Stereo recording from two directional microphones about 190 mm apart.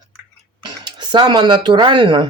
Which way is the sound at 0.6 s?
25° right (ahead or behind).